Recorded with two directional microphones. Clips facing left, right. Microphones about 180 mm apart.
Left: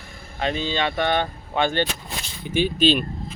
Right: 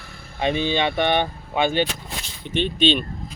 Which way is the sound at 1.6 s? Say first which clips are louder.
Right 1 dB; 10° right (ahead or behind).